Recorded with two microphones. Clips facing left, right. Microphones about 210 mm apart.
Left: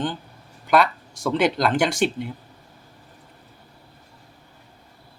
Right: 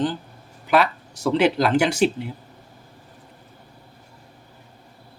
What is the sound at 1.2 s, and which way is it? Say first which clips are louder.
Speech: right 2 dB; 5° right (ahead or behind).